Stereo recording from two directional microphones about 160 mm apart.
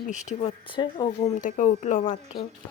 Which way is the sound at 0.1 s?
50° left (ahead or behind).